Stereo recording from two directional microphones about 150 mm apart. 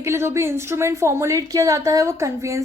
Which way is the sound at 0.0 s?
15° right (ahead or behind).